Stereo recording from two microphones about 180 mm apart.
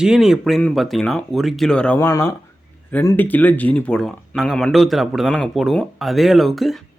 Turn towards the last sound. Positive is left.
turn(degrees=0)  # may be behind; listen again after turning